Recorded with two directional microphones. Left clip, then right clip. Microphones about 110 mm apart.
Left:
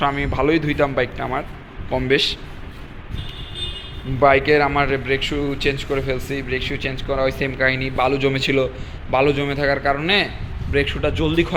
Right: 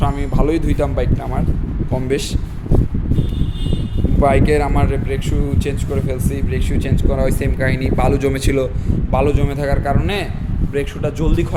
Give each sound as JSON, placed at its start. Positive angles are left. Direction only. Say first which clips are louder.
{"t": 0.0, "sound": "speech", "louder": "left 1 dB", "side_deg": -25}
{"t": 4.2, "sound": "speech", "louder": "left 1 dB", "side_deg": -35}
{"t": 4.7, "sound": "speech", "louder": "left 2 dB", "side_deg": -20}
{"t": 5.0, "sound": "speech", "louder": "left 3 dB", "side_deg": -10}
{"t": 6.7, "sound": "speech", "louder": "right 1 dB", "side_deg": -50}
{"t": 9.1, "sound": "speech", "louder": "left 1 dB", "side_deg": -25}